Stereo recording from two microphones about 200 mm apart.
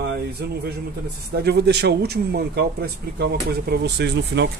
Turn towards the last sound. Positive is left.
turn(degrees=-55)  # may be behind; listen again after turning